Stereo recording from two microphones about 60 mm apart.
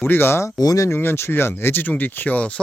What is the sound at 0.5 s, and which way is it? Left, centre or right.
Speech, left.